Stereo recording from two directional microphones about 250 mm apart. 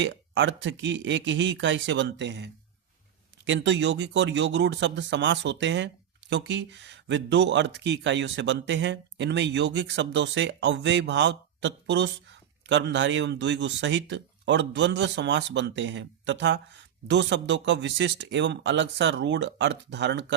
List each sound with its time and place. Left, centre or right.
0.0 s speech: right